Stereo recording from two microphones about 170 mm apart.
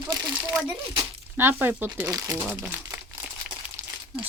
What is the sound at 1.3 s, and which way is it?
Speech, 10° right (ahead or behind).